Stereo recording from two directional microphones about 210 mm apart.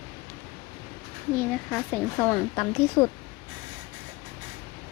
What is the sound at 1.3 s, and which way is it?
Speech, 5° left (ahead or behind).